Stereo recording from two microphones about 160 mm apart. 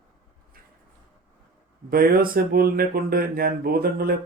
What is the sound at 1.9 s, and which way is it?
Speech, 65° right (ahead or behind).